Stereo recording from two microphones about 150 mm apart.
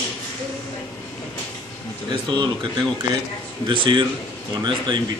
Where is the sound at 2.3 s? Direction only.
30° right (ahead or behind).